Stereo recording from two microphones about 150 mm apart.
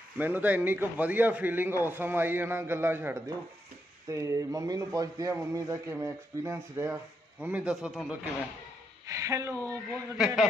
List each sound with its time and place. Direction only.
0.2 s a man's voice: 10° right (ahead or behind)
9.0 s speech: 20° right (ahead or behind)
10.1 s a man's voice: 5° right (ahead or behind)